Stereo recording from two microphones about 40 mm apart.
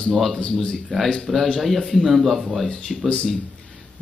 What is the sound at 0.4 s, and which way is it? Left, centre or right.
Speech, left.